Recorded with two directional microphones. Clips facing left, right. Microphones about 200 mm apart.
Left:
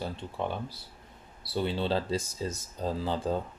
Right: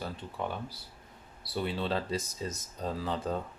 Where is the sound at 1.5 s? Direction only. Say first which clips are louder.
Left 3 dB; 30° left (ahead or behind).